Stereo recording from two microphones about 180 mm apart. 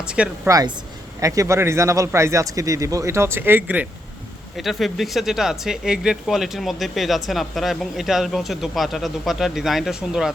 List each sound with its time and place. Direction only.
0.0 s speech: 5° right (ahead or behind)
0.4 s speech: 20° right (ahead or behind); by 10.3 s centre (ahead or behind)